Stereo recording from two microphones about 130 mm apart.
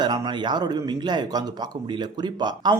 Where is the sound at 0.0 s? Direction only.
35° right (ahead or behind).